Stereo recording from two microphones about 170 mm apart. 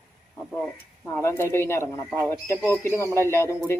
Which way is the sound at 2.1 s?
20° right (ahead or behind).